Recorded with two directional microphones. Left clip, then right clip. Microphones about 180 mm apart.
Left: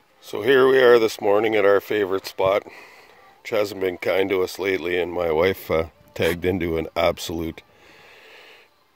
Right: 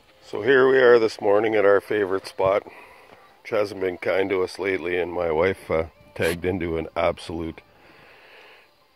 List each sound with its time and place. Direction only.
0.3 s speech: 20° left (ahead or behind)